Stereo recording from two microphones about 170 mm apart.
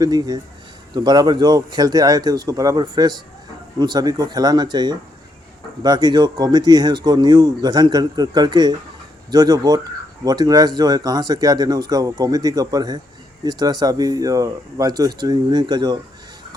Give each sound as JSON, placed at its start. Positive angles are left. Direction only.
{"t": 0.0, "sound": "speech", "side_deg": -20}